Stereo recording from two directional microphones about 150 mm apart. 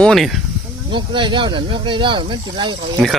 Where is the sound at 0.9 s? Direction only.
35° right (ahead or behind).